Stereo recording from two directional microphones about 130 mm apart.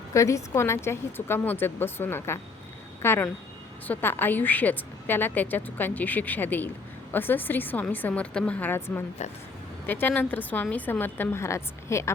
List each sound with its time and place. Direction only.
0.1 s a woman's voice: 25° left (ahead or behind)